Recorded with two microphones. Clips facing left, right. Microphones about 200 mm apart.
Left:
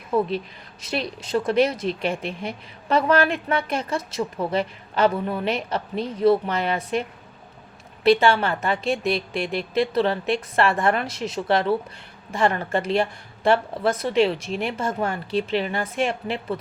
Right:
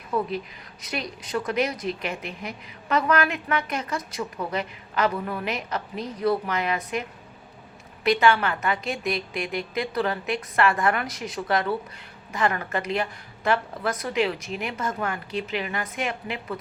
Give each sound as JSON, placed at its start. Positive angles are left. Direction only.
{"t": 0.1, "sound": "a woman's voice", "side_deg": 30}
{"t": 8.0, "sound": "a woman's voice", "side_deg": 30}